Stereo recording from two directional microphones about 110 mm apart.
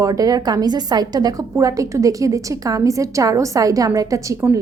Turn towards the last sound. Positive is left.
turn(degrees=-30)  # may be behind; listen again after turning